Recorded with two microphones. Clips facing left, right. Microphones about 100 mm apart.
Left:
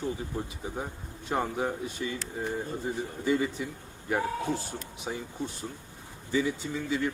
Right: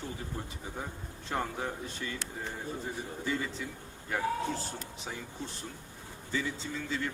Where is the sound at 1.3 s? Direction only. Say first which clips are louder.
Left 5 dB; 15° left (ahead or behind).